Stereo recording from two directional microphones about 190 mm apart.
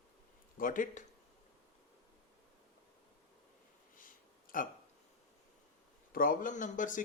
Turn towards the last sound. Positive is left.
turn(degrees=45)  # may be behind; listen again after turning